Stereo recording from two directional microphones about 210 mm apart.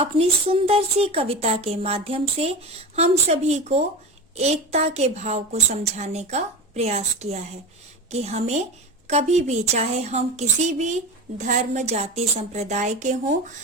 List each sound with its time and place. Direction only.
0.0 s a woman's voice: 25° right (ahead or behind)